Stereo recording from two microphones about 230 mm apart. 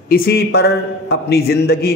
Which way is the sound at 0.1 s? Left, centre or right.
Left.